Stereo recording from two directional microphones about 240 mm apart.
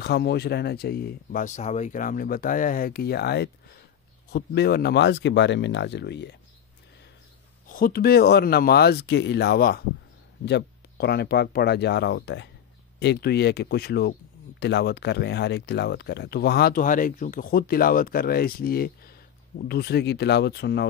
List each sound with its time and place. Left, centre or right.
0.0 s speech: left
7.6 s speech: left